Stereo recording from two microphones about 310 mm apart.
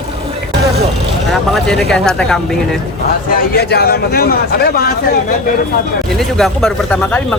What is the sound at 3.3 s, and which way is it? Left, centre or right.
Speech, left.